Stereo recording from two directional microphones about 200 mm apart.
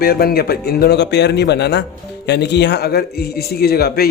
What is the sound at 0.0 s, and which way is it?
Speech, 50° left (ahead or behind).